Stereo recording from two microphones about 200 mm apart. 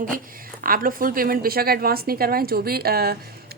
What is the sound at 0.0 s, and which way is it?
A woman's voice, 45° right (ahead or behind).